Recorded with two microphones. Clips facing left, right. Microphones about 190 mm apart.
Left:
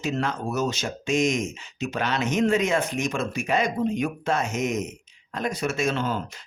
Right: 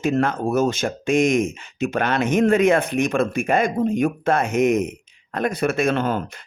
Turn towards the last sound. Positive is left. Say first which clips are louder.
# right 5 dB
turn(degrees=-55)  # may be behind; listen again after turning